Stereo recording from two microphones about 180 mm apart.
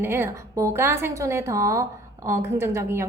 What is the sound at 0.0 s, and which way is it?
A woman's voice, 10° right (ahead or behind).